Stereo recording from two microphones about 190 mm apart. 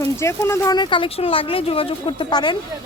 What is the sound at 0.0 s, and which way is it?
Speech, 15° left (ahead or behind).